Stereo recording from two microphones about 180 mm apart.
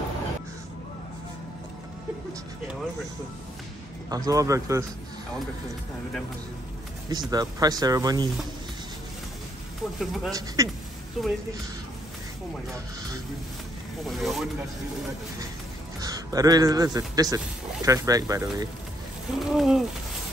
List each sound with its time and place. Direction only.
4.1 s speech: 20° right (ahead or behind)
7.1 s speech: 20° right (ahead or behind)
9.9 s speech: centre (ahead or behind)
10.3 s speech: 20° right (ahead or behind)
11.2 s speech: centre (ahead or behind)
14.0 s speech: centre (ahead or behind)
16.0 s a man's voice: 20° right (ahead or behind)
19.3 s speech: centre (ahead or behind)